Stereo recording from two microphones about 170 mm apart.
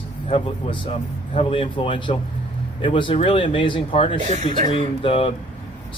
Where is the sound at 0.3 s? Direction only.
35° left (ahead or behind).